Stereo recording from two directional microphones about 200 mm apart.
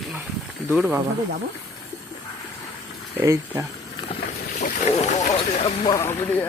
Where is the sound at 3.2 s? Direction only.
15° right (ahead or behind).